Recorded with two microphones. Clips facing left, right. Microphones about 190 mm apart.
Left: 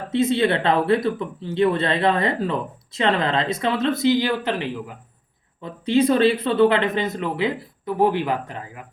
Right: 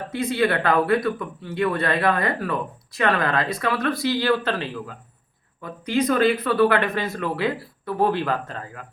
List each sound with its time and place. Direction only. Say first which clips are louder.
0.1 s speech: left 3 dB; 25° left (ahead or behind)